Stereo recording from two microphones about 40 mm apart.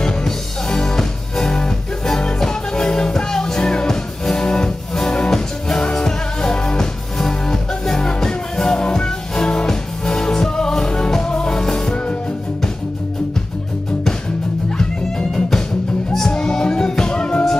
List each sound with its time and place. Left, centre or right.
0.0 s music: centre
14.8 s music: centre